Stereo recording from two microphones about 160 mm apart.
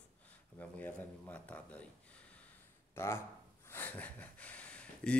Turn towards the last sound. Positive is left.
turn(degrees=5)  # may be behind; listen again after turning